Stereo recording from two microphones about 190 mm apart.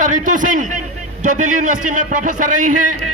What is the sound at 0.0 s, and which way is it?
A man's voice, 40° right (ahead or behind).